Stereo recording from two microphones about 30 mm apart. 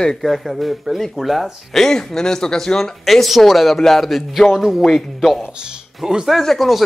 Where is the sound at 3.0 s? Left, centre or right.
Centre.